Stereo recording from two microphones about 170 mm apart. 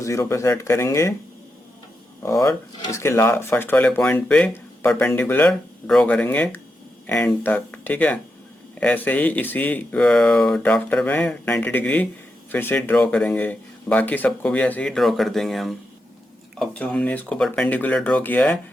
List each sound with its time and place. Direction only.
0.0 s speech: 20° left (ahead or behind)
2.2 s speech: 20° left (ahead or behind)